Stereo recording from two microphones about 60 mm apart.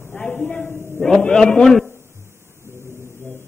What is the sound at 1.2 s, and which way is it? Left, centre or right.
Speech, centre.